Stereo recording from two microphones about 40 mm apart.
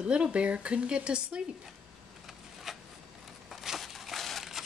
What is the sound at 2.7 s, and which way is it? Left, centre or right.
Zipper, centre.